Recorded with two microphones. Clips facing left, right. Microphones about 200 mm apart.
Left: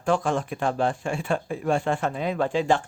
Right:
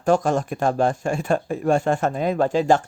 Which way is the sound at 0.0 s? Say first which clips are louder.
Right 5 dB; 40° right (ahead or behind).